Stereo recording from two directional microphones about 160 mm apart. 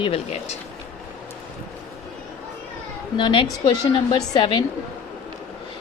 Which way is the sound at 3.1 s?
30° left (ahead or behind).